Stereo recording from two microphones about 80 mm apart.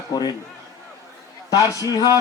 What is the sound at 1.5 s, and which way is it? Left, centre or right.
Speech, left.